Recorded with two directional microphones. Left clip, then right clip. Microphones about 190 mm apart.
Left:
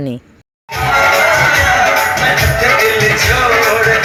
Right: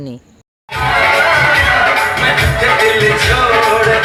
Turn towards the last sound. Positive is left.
turn(degrees=10)  # may be behind; listen again after turning